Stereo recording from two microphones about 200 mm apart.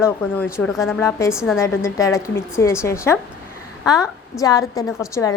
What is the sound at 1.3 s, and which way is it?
Speech, 5° right (ahead or behind).